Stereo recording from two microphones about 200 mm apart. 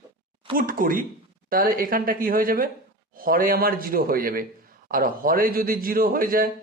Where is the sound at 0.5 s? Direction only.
45° right (ahead or behind).